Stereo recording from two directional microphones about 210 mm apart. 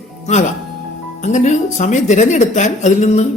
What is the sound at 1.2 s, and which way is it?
Speech, 35° left (ahead or behind).